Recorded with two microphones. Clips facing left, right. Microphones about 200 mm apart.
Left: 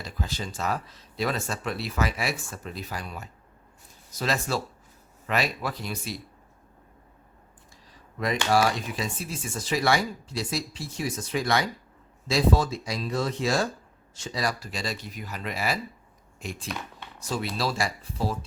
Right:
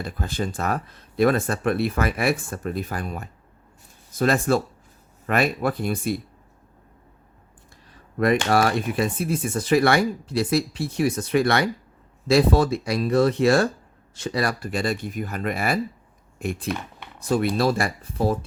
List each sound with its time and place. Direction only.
0.0 s speech: 55° right (ahead or behind)
8.2 s speech: 60° right (ahead or behind)